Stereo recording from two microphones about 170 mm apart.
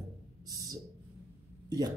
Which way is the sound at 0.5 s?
20° right (ahead or behind).